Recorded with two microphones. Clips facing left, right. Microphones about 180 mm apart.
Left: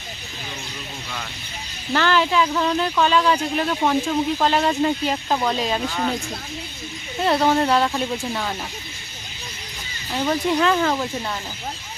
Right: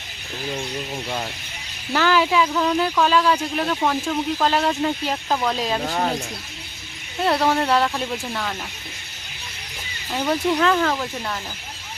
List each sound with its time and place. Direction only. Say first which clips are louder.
1.9 s speech: right 1 dB; 5° right (ahead or behind)
5.8 s speech: right 1 dB; 40° right (ahead or behind)
7.2 s speech: left 1 dB; centre (ahead or behind)
10.1 s speech: even; centre (ahead or behind)